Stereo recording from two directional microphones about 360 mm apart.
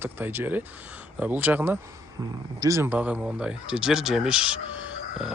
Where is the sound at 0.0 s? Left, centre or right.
Centre.